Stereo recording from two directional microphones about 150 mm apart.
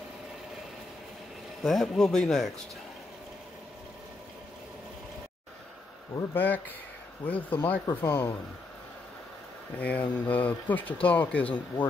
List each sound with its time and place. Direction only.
1.6 s speech: centre (ahead or behind)
6.1 s speech: 15° left (ahead or behind)
9.8 s speech: 10° left (ahead or behind)